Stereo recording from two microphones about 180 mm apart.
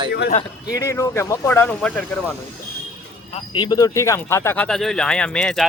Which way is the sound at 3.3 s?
25° left (ahead or behind).